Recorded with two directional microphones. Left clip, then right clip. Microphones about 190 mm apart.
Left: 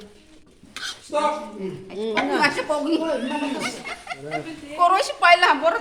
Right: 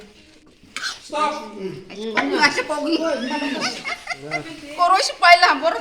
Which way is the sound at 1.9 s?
40° left (ahead or behind).